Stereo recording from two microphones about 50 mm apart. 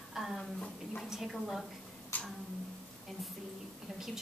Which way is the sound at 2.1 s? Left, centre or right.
Left.